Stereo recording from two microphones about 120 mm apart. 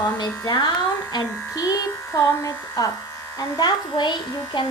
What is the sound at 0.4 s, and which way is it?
Speech, 35° left (ahead or behind).